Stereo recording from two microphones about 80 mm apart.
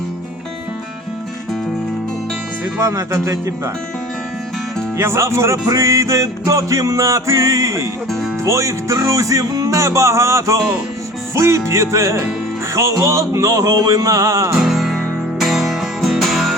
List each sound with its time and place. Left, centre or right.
2.7 s music: right
4.9 s music: right
14.6 s music: centre